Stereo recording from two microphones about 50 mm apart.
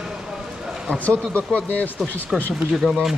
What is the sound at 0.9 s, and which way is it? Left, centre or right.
Speech, left.